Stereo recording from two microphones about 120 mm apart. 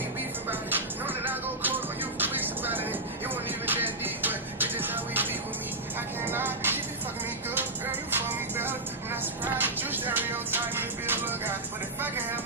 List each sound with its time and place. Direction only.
0.5 s music: 15° right (ahead or behind)
8.1 s music: 15° right (ahead or behind)
12.0 s vehicle: 15° right (ahead or behind)